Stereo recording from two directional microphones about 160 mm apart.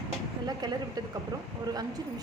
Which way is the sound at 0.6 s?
25° right (ahead or behind).